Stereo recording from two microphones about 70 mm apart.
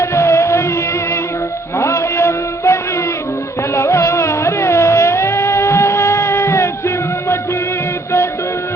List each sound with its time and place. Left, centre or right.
0.0 s music: left
1.8 s a sound: left
3.8 s music: left